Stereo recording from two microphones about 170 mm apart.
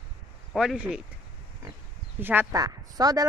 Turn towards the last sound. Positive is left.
turn(degrees=-20)  # may be behind; listen again after turning